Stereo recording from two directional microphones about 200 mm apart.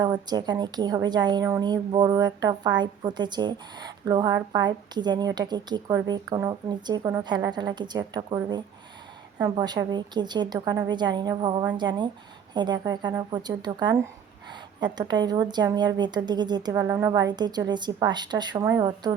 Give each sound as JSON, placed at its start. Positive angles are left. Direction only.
{"t": 0.0, "sound": "a woman's voice", "side_deg": -20}